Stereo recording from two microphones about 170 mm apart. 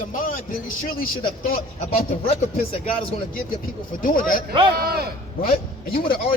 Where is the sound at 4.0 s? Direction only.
55° left (ahead or behind).